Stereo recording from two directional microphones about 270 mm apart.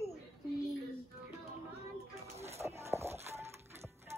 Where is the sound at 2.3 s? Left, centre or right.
Right.